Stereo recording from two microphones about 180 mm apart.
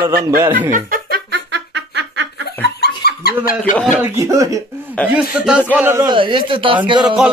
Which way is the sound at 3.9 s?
15° right (ahead or behind).